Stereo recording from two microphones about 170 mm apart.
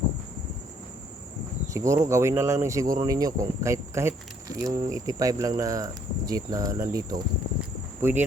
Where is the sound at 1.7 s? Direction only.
20° right (ahead or behind).